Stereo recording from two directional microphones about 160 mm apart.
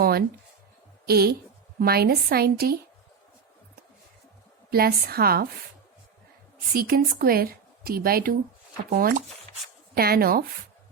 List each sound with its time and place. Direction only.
0.0 s a sound: 70° right (ahead or behind)
1.0 s a woman's voice: 75° right (ahead or behind)
4.7 s a woman's voice: 75° right (ahead or behind)
6.7 s a woman's voice: 70° right (ahead or behind)